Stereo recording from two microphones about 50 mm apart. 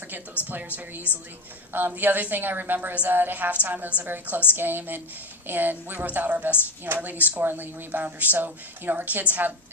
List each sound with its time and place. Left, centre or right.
1.1 s a woman's voice: left
1.7 s a woman's voice: right